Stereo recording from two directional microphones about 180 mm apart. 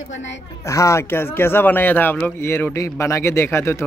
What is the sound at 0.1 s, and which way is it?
Speech, 90° left.